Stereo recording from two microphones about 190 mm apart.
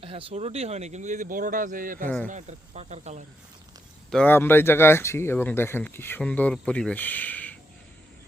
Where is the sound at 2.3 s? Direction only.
35° right (ahead or behind).